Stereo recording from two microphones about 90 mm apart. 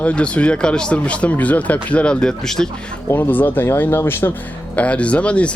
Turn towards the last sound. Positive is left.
turn(degrees=15)  # may be behind; listen again after turning